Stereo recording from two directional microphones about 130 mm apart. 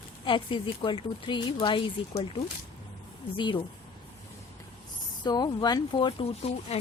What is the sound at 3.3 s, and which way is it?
Speech, 40° left (ahead or behind).